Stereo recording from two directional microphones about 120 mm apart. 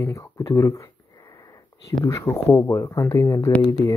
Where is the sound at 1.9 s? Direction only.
30° left (ahead or behind).